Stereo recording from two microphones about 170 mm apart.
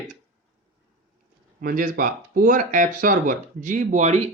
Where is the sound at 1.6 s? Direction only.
55° right (ahead or behind).